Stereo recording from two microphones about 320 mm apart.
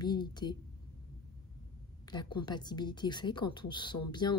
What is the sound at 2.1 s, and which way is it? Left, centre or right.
Speech, centre.